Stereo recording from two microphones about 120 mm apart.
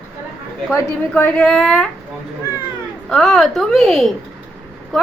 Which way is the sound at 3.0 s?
5° left (ahead or behind).